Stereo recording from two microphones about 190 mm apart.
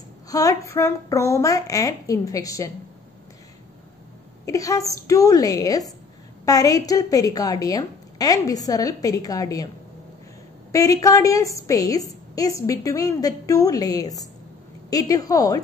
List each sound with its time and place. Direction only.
0.3 s a woman's voice: 20° left (ahead or behind)
4.5 s a woman's voice: 15° left (ahead or behind)
10.7 s a woman's voice: 20° left (ahead or behind)